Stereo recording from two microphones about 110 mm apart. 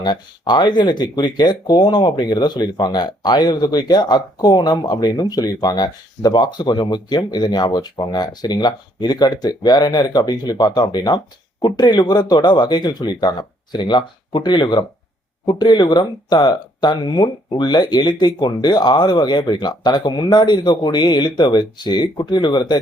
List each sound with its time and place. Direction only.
0.0 s speech: 40° left (ahead or behind)